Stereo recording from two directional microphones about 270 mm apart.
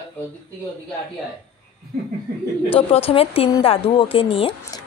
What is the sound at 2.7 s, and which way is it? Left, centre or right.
Speech, left.